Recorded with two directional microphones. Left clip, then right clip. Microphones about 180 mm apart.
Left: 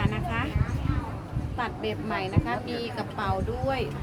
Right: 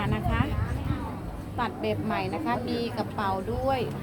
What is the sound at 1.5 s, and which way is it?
A woman's voice, 10° right (ahead or behind).